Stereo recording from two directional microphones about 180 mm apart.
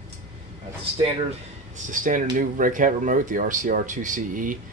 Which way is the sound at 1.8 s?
45° right (ahead or behind).